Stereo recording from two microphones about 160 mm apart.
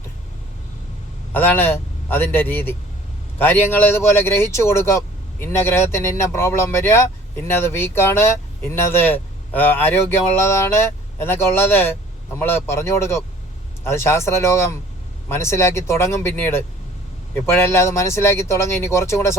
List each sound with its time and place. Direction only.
1.3 s a man's voice: 10° left (ahead or behind)